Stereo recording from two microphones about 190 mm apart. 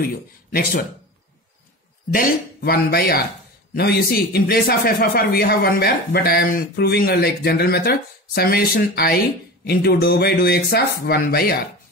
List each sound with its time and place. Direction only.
0.0 s a man's voice: 50° left (ahead or behind)
2.1 s a man's voice: 50° left (ahead or behind)